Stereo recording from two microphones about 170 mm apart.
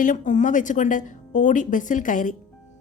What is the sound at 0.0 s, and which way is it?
A woman's voice, 50° left (ahead or behind).